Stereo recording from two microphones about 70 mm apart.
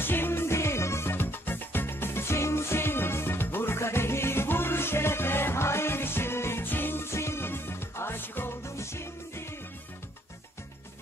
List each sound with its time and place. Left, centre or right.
0.0 s music: left
8.6 s music: left